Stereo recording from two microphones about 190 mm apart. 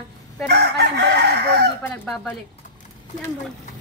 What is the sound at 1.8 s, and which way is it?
Speech, 5° left (ahead or behind).